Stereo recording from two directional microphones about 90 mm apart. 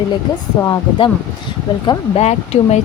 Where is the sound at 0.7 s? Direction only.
65° left (ahead or behind).